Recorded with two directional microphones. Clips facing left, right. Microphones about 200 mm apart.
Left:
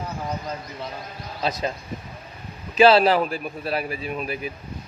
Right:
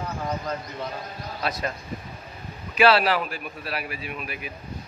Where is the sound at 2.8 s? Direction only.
30° left (ahead or behind).